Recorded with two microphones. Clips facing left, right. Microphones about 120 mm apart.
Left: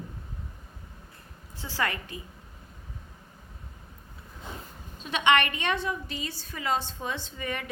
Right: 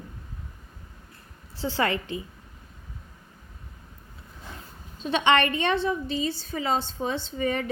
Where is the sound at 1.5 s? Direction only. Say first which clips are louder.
Right 5 dB; 30° right (ahead or behind).